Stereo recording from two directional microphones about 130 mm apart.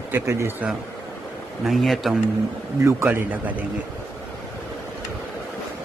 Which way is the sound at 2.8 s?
15° right (ahead or behind).